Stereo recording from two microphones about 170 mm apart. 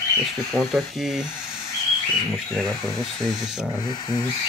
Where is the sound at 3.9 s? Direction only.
25° left (ahead or behind).